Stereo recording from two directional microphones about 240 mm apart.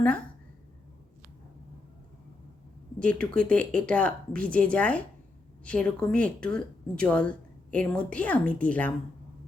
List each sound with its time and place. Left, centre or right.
3.0 s speech: centre